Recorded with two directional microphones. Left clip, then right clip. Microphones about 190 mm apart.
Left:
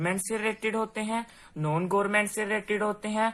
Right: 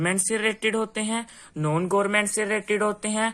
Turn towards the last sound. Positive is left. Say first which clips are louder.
# right 3 dB
turn(degrees=-35)  # may be behind; listen again after turning